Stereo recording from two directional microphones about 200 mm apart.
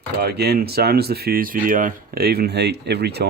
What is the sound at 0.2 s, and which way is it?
Speech, 55° right (ahead or behind).